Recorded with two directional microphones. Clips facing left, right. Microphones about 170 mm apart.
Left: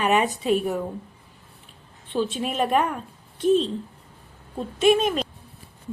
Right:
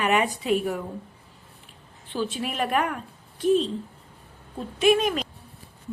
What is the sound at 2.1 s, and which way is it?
Speech, 25° left (ahead or behind).